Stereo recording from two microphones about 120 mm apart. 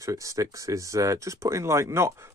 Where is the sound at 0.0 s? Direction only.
25° right (ahead or behind).